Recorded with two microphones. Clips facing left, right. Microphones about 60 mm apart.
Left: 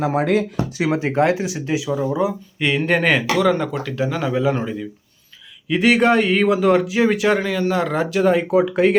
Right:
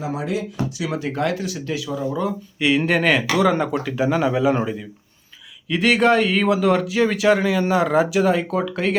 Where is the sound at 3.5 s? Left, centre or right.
Centre.